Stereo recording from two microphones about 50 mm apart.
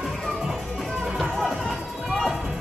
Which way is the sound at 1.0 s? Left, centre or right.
Centre.